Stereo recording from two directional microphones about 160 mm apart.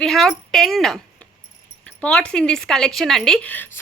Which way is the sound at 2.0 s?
5° left (ahead or behind).